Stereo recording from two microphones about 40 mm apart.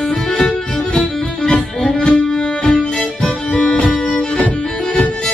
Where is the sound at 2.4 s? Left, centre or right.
Centre.